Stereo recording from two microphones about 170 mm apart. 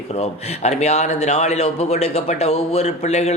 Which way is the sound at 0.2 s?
40° left (ahead or behind).